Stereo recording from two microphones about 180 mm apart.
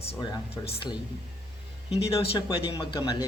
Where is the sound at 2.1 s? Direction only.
25° left (ahead or behind).